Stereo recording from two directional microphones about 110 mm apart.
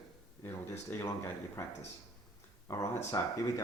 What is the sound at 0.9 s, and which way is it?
Speech, 25° left (ahead or behind).